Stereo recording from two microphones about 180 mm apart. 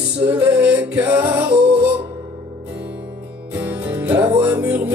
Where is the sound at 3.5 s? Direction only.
10° right (ahead or behind).